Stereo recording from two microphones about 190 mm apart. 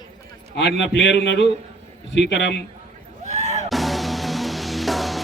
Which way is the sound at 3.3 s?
35° right (ahead or behind).